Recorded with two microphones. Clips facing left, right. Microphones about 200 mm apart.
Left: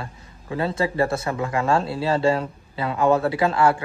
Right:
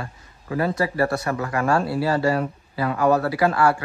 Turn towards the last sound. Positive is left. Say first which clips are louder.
# even
turn(degrees=25)  # may be behind; listen again after turning